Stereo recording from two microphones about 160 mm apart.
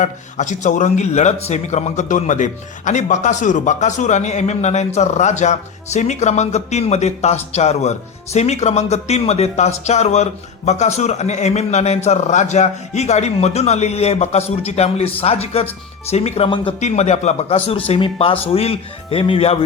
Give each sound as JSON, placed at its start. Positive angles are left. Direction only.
{"t": 0.0, "sound": "a man's voice", "side_deg": 50}